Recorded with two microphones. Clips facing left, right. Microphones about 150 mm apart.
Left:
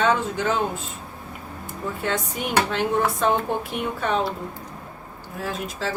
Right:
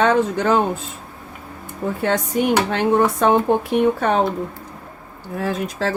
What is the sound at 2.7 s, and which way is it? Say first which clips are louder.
Speech: right 6 dB; 60° right (ahead or behind).